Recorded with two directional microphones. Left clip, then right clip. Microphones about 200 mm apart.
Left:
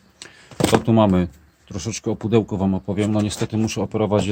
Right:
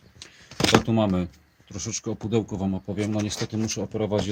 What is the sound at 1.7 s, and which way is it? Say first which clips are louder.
Speech: left 5 dB; centre (ahead or behind).